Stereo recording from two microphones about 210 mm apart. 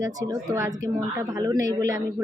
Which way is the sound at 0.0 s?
15° right (ahead or behind).